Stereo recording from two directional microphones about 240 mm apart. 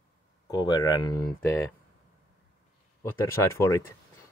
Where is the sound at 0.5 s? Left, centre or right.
Centre.